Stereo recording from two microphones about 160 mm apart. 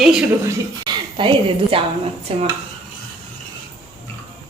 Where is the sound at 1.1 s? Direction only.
35° right (ahead or behind).